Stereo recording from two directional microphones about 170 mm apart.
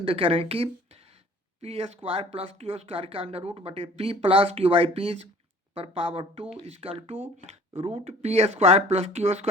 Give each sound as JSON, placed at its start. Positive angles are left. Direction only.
{"t": 0.0, "sound": "speech", "side_deg": -35}